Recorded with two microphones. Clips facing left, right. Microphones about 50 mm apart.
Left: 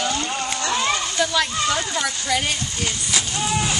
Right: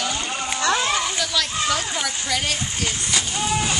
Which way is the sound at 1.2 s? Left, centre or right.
Centre.